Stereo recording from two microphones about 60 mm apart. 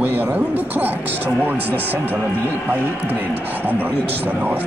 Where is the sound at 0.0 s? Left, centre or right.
Right.